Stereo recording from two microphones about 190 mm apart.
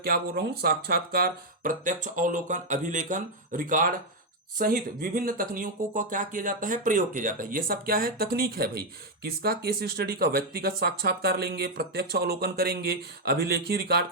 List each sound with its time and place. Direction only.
0.0 s speech: 55° right (ahead or behind)